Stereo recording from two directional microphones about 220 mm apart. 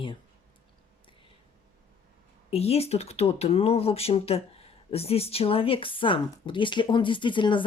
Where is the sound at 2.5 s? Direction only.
25° left (ahead or behind).